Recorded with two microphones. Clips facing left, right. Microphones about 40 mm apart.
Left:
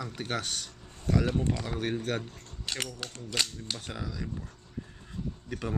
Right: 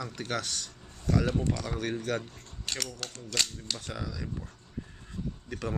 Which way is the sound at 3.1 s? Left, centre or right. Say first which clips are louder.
Even; centre.